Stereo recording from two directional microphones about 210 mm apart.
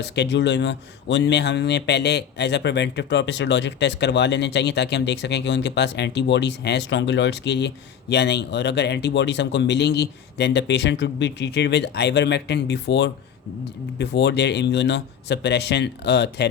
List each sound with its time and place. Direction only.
0.0 s speech: 55° left (ahead or behind)